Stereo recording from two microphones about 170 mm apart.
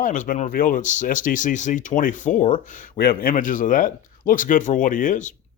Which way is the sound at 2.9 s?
65° left (ahead or behind).